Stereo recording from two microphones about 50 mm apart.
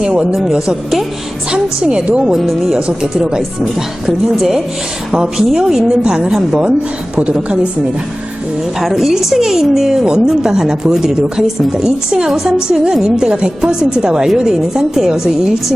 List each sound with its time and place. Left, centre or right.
0.0 s a woman's voice: centre
1.5 s a woman's voice: right
2.2 s speech: centre
2.7 s a woman's voice: centre
8.8 s a woman's voice: centre